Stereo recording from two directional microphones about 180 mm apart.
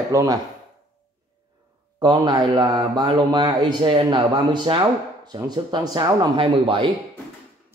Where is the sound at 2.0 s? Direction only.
25° right (ahead or behind).